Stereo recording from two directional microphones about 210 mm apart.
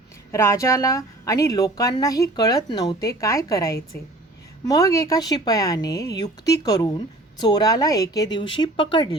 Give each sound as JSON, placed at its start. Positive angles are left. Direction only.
{"t": 0.3, "sound": "a woman's voice", "side_deg": 15}